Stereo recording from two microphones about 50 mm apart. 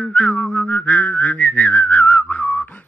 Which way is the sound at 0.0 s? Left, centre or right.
Left.